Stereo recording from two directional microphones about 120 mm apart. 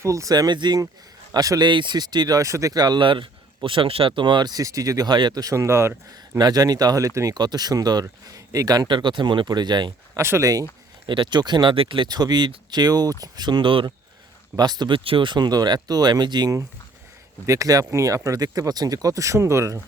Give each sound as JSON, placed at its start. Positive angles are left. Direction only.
{"t": 0.0, "sound": "speech", "side_deg": -25}
{"t": 10.2, "sound": "speech", "side_deg": -20}
{"t": 11.0, "sound": "speech", "side_deg": -40}